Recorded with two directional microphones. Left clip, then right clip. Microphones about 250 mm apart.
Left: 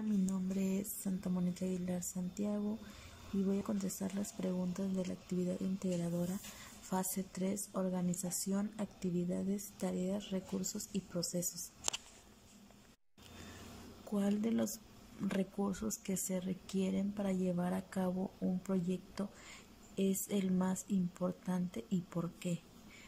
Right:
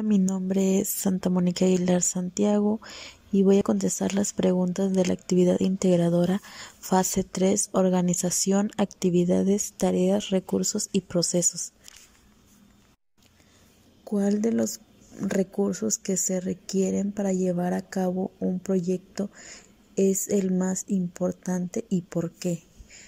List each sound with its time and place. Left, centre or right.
0.1 s speech: right
14.1 s speech: centre